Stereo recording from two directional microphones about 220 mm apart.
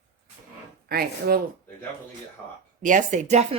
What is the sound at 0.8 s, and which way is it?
Speech, 45° right (ahead or behind).